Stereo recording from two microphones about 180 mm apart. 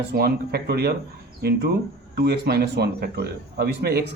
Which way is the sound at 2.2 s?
65° right (ahead or behind).